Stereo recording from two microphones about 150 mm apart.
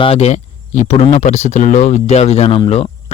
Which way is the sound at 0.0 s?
45° left (ahead or behind).